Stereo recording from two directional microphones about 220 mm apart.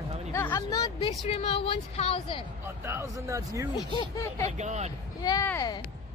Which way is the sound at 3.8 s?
20° left (ahead or behind).